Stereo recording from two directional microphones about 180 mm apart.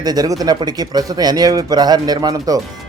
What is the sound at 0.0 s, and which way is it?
Speech, 20° right (ahead or behind).